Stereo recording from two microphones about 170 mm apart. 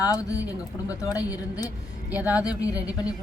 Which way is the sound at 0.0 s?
20° left (ahead or behind).